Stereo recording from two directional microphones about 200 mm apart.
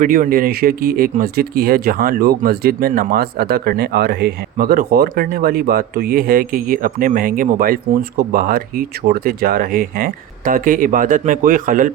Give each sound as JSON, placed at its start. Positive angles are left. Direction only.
{"t": 0.0, "sound": "speech", "side_deg": -45}